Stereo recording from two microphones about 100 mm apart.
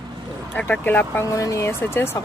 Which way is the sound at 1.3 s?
30° left (ahead or behind).